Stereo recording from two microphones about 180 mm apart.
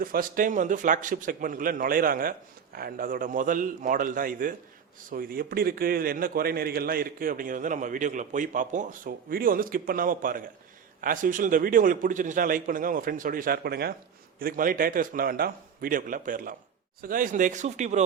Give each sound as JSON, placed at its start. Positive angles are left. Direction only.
{"t": 0.0, "sound": "a man's voice", "side_deg": -50}